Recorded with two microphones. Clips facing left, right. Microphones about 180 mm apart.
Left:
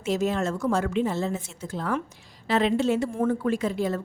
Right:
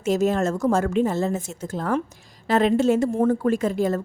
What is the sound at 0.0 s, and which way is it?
A woman's voice, 45° right (ahead or behind).